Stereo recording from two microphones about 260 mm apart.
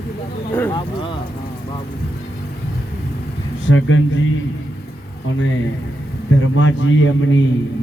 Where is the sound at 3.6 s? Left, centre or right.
Left.